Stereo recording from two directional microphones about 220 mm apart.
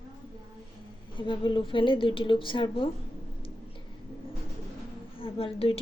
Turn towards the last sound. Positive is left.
turn(degrees=25)  # may be behind; listen again after turning